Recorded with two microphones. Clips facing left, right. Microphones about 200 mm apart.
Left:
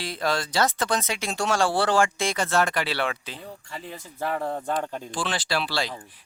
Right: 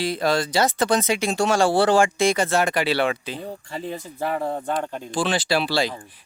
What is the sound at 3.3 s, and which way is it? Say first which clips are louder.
Speech: right 7 dB; 30° right (ahead or behind).